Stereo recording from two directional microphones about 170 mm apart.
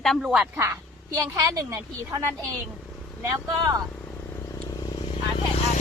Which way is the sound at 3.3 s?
20° right (ahead or behind).